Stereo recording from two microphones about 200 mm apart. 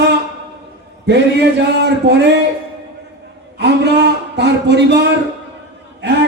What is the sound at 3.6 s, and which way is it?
A man's voice, 55° right (ahead or behind).